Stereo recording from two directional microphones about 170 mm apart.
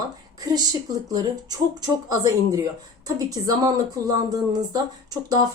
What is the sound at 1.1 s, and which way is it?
A woman's voice, 25° right (ahead or behind).